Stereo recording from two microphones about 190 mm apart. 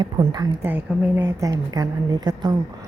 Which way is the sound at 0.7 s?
10° right (ahead or behind).